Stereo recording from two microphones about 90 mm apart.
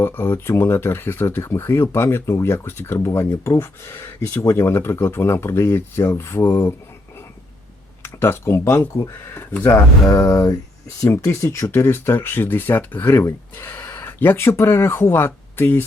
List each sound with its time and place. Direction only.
0.0 s speech: 25° left (ahead or behind)
8.0 s speech: 30° left (ahead or behind)
10.0 s a sound: 40° left (ahead or behind)
11.1 s speech: 30° left (ahead or behind)